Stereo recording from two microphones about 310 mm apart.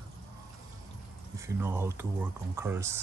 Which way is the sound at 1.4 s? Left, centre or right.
Centre.